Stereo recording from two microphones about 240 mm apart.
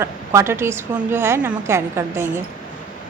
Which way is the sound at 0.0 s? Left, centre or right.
Centre.